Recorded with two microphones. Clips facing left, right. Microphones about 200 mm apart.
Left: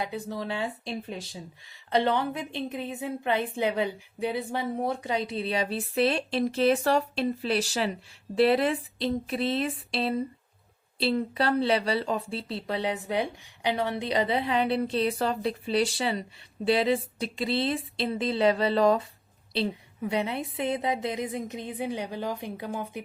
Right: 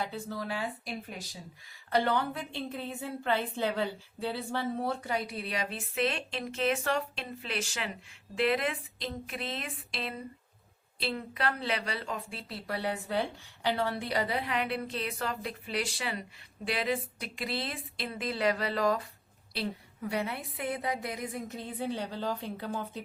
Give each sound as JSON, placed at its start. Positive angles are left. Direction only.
{"t": 0.0, "sound": "a woman's voice", "side_deg": 20}